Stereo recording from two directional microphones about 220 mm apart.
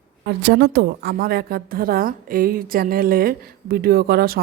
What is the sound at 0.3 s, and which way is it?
A woman's voice, 50° right (ahead or behind).